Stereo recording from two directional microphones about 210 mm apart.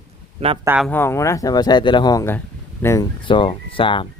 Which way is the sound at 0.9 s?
10° left (ahead or behind).